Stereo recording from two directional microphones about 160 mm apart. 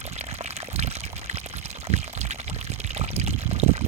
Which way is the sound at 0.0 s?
40° right (ahead or behind).